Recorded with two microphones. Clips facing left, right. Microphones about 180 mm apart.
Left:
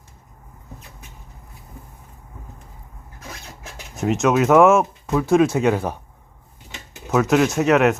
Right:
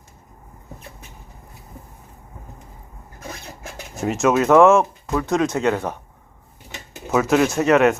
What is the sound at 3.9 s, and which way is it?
Speech, centre (ahead or behind).